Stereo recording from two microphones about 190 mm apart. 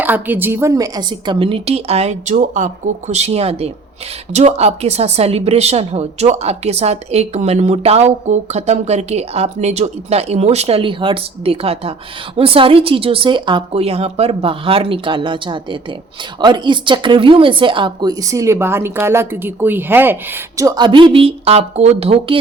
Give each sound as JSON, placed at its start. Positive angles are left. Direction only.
{"t": 0.0, "sound": "a woman's voice", "side_deg": -10}